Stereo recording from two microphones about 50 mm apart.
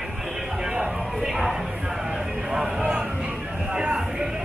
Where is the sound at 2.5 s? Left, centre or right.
Centre.